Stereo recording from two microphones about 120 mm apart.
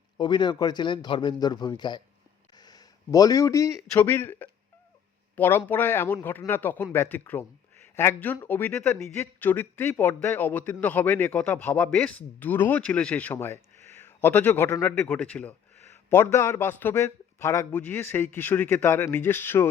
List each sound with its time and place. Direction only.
0.2 s a man's voice: 40° left (ahead or behind)
2.6 s a sound: 35° left (ahead or behind)
3.9 s speech: 20° left (ahead or behind)
16.2 s speech: 25° left (ahead or behind)